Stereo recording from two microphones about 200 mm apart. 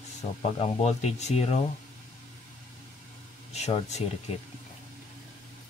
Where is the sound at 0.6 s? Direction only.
30° left (ahead or behind).